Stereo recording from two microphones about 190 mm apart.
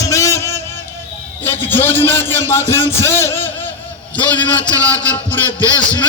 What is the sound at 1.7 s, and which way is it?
A man's voice, 10° left (ahead or behind).